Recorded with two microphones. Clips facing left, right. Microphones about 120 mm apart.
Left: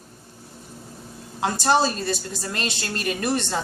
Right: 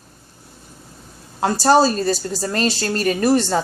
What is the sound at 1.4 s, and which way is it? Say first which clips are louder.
A woman's voice: right 6 dB; 35° right (ahead or behind).